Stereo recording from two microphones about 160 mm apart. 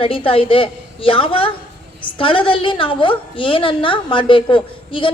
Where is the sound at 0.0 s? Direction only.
35° left (ahead or behind).